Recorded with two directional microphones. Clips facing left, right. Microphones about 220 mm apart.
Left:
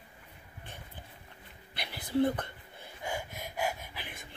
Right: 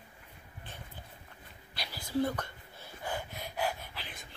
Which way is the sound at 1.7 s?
20° left (ahead or behind).